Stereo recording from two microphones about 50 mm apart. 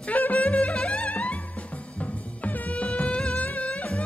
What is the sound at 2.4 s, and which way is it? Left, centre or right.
Music, left.